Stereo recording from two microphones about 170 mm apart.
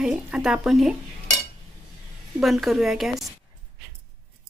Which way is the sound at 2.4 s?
Centre (ahead or behind).